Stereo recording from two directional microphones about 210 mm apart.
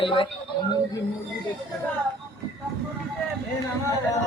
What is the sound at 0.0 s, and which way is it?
Speech, 25° left (ahead or behind).